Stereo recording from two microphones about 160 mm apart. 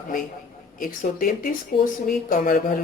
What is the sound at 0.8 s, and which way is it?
Speech, 60° left (ahead or behind).